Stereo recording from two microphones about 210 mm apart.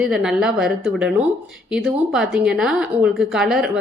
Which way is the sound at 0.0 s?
5° right (ahead or behind).